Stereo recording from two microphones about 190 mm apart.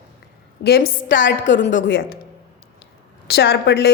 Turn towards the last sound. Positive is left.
turn(degrees=60)  # may be behind; listen again after turning